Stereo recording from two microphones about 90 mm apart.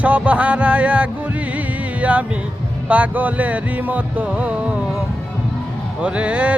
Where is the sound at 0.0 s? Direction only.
15° right (ahead or behind).